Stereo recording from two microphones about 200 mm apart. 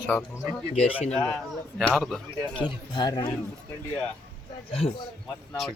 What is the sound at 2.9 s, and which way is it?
Speech, 20° left (ahead or behind).